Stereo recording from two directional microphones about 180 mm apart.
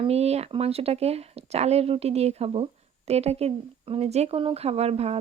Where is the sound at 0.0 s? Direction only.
35° right (ahead or behind).